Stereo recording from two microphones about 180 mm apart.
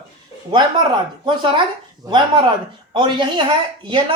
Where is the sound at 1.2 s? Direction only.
25° right (ahead or behind).